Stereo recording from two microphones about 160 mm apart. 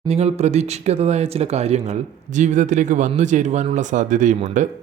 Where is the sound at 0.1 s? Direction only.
40° right (ahead or behind).